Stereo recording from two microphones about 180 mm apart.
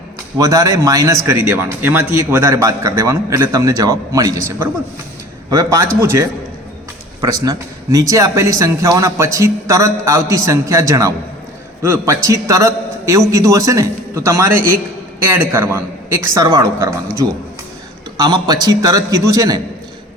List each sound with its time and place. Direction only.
0.3 s a man's voice: 20° right (ahead or behind)
18.2 s a man's voice: 20° right (ahead or behind)